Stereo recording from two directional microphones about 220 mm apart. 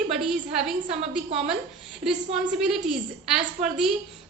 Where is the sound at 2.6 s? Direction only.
Centre (ahead or behind).